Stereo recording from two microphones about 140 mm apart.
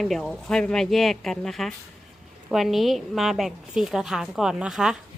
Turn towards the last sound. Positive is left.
turn(degrees=-5)  # may be behind; listen again after turning